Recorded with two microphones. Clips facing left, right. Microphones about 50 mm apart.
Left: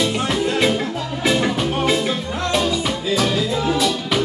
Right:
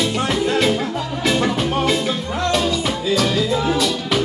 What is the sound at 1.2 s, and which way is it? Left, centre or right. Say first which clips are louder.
Music: even; centre.